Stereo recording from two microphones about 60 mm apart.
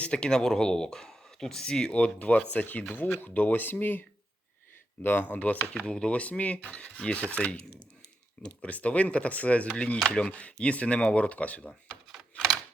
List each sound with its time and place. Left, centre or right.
0.0 s speech: centre; by 4.0 s left
5.0 s speech: left
12.3 s a sound: centre